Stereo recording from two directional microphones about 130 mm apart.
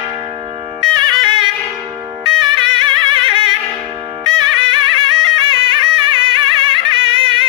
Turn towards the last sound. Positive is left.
turn(degrees=-40)  # may be behind; listen again after turning